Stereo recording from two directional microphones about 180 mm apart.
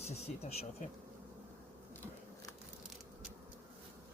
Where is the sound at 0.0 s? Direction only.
40° left (ahead or behind).